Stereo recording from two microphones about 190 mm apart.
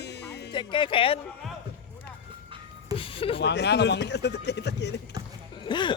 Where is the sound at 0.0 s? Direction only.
60° left (ahead or behind).